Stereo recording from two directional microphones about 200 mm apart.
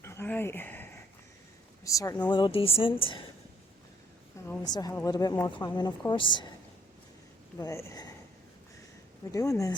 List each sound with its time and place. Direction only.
0.0 s a sound: 15° left (ahead or behind)
1.8 s a woman's voice: 15° left (ahead or behind)
4.4 s a woman's voice: 20° left (ahead or behind)
7.6 s speech: 15° left (ahead or behind)
9.3 s speech: 15° left (ahead or behind)